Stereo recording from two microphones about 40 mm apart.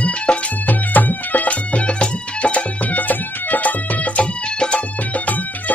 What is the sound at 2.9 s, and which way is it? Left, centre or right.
Music, left.